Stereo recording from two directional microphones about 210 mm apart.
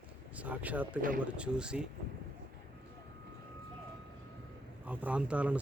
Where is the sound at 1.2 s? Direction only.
5° right (ahead or behind).